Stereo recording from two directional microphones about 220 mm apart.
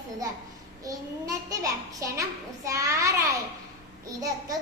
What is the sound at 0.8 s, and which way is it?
A child's voice, 15° right (ahead or behind).